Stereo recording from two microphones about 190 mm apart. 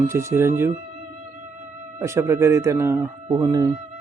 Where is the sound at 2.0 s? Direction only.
15° right (ahead or behind).